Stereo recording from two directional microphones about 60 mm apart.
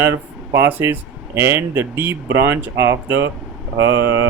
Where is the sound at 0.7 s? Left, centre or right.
Right.